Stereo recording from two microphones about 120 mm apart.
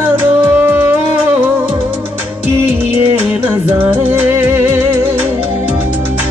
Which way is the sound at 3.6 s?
15° right (ahead or behind).